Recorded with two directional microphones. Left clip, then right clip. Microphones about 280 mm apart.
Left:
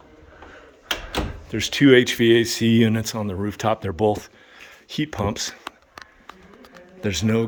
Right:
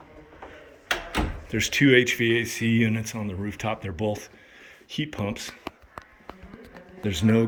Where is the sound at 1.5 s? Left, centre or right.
Centre.